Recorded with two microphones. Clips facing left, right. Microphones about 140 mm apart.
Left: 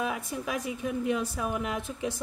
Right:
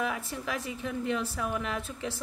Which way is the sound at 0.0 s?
15° left (ahead or behind).